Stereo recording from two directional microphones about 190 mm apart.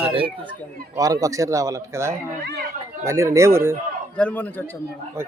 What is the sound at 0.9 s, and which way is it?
Speech, 20° right (ahead or behind).